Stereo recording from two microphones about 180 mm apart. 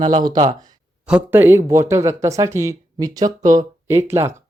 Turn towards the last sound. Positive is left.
turn(degrees=-15)  # may be behind; listen again after turning